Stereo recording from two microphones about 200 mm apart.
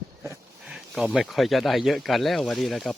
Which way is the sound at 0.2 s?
5° right (ahead or behind).